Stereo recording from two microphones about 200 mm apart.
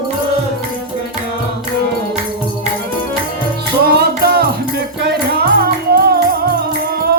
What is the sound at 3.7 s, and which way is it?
Music, 50° right (ahead or behind).